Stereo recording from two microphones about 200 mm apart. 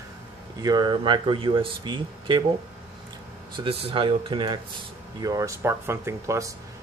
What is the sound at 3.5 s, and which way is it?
Speech, 25° right (ahead or behind).